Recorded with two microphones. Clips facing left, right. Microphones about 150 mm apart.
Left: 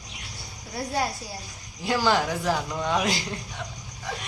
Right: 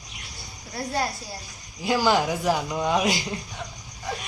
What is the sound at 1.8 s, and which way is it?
Speech, 10° right (ahead or behind).